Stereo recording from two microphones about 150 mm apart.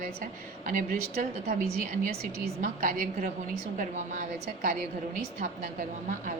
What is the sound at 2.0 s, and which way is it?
Speech, 90° right.